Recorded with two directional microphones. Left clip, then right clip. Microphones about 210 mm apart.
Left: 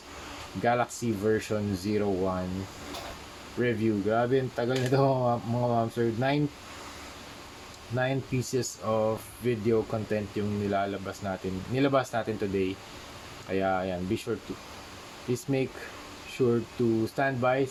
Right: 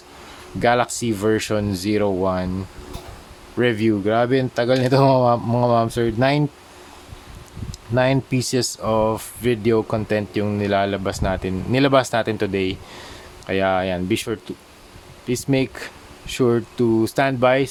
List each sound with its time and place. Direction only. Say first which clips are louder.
0.6 s speech: right 9 dB; 35° right (ahead or behind)
3.6 s speech: right 9 dB; 40° right (ahead or behind)
7.9 s speech: right 11 dB; 40° right (ahead or behind)
17.2 s speech: right 9 dB; 40° right (ahead or behind)